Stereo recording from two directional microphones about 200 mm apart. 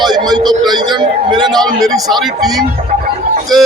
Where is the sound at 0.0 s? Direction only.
20° right (ahead or behind).